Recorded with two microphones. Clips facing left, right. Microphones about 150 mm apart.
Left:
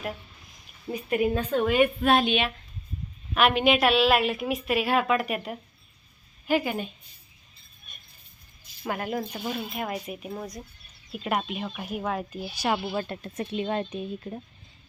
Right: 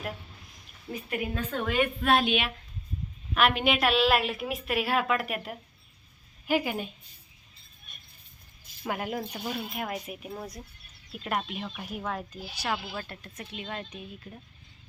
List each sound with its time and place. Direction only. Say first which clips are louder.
1.1 s speech: left 8 dB; 25° left (ahead or behind)
2.0 s a woman's voice: left 3 dB; 5° right (ahead or behind)
8.9 s a woman's voice: left 2 dB; 5° right (ahead or behind); by 12.7 s 10° left (ahead or behind)
12.7 s speech: left 6 dB; 20° left (ahead or behind)